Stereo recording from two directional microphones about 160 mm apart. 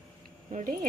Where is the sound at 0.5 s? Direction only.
60° right (ahead or behind).